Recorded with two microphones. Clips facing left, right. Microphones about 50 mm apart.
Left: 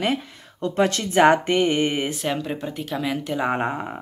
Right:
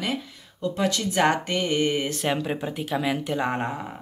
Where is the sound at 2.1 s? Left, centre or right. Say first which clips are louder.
Even; centre.